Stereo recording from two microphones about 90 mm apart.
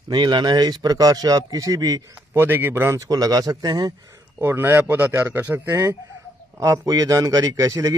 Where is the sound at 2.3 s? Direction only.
25° right (ahead or behind).